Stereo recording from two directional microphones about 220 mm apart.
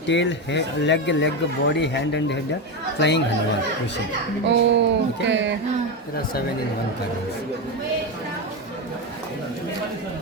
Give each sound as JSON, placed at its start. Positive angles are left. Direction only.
{"t": 0.1, "sound": "speech", "side_deg": 55}
{"t": 4.4, "sound": "speech", "side_deg": -55}